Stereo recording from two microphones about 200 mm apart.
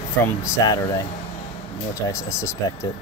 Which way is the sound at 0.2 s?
15° left (ahead or behind).